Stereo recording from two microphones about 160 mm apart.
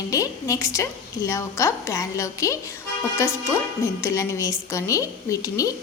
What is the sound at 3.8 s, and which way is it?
A woman's voice, 20° left (ahead or behind).